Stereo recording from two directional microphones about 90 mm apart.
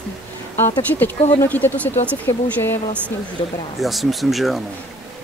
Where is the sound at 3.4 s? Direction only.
90° left.